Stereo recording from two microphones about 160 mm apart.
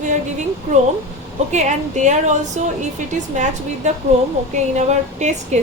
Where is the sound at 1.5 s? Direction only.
50° right (ahead or behind).